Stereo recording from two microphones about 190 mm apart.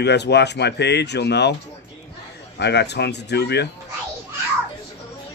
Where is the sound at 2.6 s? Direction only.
65° left (ahead or behind).